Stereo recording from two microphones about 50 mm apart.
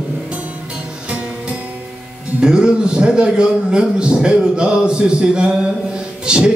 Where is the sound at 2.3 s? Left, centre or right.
Centre.